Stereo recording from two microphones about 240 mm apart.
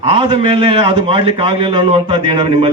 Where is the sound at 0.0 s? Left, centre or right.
Right.